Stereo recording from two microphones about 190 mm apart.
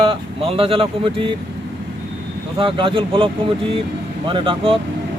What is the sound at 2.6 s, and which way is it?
Speech, 25° right (ahead or behind).